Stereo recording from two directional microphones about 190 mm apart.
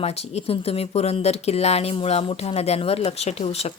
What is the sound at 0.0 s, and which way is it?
Speech, 35° left (ahead or behind).